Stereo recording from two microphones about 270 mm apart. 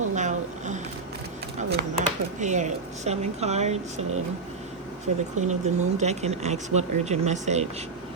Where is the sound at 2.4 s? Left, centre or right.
Right.